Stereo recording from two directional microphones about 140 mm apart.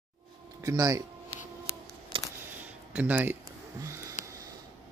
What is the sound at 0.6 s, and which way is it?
Speech, 25° right (ahead or behind).